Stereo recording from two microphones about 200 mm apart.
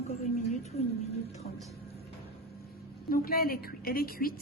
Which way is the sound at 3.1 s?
50° left (ahead or behind).